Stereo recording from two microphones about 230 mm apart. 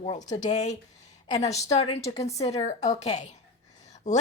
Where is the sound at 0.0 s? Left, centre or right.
Left.